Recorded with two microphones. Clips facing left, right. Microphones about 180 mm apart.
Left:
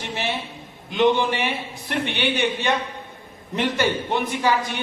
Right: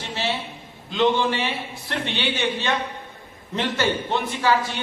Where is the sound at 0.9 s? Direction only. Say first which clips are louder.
Left 1 dB; 15° left (ahead or behind).